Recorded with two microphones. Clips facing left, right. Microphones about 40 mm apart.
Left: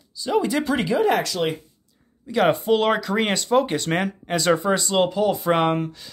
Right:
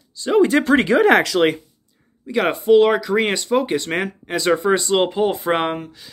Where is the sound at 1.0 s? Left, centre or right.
Right.